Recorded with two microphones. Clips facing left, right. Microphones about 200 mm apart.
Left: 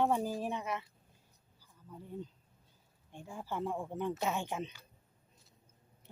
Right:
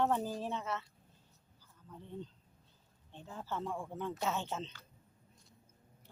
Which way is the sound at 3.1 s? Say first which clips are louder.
Left 2 dB; 10° left (ahead or behind).